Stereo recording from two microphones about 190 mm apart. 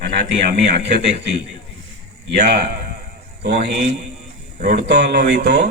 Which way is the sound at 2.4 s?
50° right (ahead or behind).